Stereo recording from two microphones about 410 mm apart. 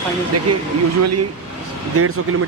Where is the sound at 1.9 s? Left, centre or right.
Right.